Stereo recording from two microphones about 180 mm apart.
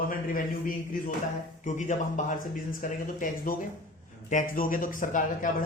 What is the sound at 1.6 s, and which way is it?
A man's voice, 45° left (ahead or behind).